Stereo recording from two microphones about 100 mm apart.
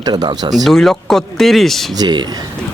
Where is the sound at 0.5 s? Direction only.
Centre (ahead or behind).